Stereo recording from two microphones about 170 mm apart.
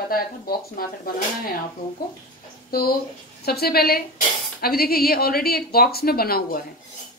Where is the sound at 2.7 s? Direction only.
65° left (ahead or behind).